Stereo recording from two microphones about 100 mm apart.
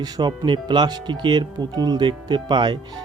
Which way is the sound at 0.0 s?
45° right (ahead or behind).